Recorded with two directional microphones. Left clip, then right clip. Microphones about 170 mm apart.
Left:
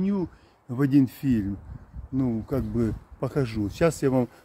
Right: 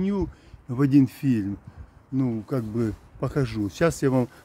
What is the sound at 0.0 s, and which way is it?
Speech, 25° right (ahead or behind).